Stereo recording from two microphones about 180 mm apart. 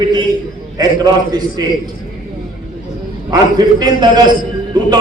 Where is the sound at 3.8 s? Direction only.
20° right (ahead or behind).